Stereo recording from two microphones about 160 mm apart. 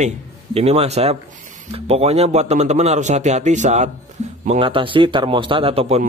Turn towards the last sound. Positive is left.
turn(degrees=-40)  # may be behind; listen again after turning